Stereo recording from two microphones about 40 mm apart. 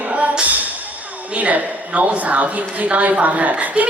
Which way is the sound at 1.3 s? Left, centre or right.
Right.